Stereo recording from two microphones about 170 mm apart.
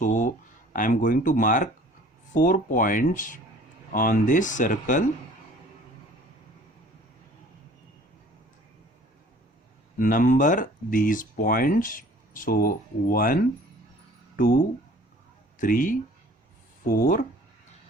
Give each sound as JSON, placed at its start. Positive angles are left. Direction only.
{"t": 0.0, "sound": "speech", "side_deg": 50}
{"t": 10.0, "sound": "speech", "side_deg": 50}